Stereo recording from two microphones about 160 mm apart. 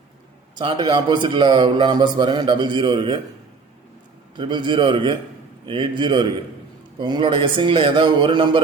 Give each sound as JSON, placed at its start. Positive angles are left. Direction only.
{"t": 0.5, "sound": "a man's voice", "side_deg": -30}
{"t": 4.4, "sound": "a man's voice", "side_deg": -30}